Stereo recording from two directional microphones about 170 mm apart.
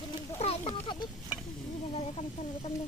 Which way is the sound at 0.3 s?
35° left (ahead or behind).